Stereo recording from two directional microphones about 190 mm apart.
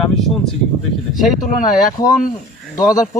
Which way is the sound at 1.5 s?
45° left (ahead or behind).